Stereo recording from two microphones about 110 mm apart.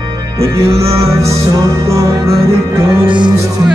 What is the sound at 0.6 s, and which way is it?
Music, 60° right (ahead or behind).